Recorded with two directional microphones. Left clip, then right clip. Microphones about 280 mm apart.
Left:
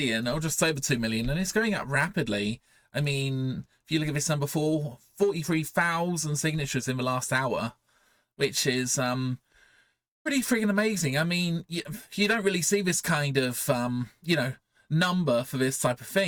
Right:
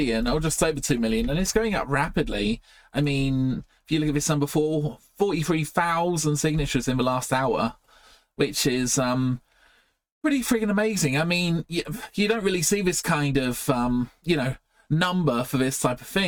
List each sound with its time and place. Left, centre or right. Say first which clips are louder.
0.0 s speech: right 4 dB; left
14.9 s speech: right 1 dB; centre